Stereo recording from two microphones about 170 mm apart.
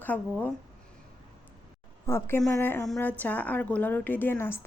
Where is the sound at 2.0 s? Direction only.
15° left (ahead or behind).